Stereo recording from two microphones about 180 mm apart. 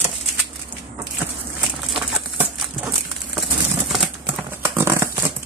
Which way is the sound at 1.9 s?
Centre (ahead or behind).